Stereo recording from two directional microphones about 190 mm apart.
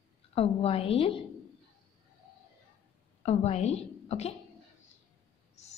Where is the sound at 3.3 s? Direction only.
35° left (ahead or behind).